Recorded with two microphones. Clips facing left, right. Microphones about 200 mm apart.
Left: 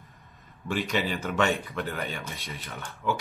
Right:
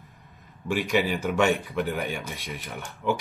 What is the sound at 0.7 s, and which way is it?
Speech, 10° right (ahead or behind).